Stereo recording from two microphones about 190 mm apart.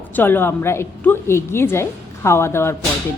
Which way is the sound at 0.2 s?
10° left (ahead or behind).